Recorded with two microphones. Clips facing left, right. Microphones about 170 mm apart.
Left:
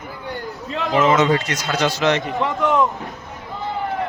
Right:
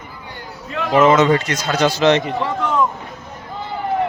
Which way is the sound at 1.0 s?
45° right (ahead or behind).